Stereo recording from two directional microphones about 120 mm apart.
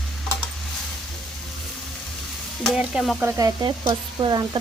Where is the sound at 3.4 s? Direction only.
30° right (ahead or behind).